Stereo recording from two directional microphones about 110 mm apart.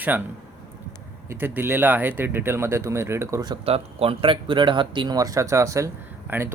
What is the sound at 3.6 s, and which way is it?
Speech, 65° right (ahead or behind).